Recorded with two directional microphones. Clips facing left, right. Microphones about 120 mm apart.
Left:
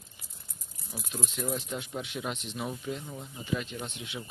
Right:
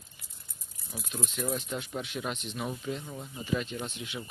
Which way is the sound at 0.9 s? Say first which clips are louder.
Even; 10° left (ahead or behind).